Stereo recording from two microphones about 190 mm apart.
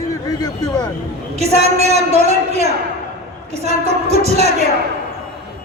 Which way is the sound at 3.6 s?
35° right (ahead or behind).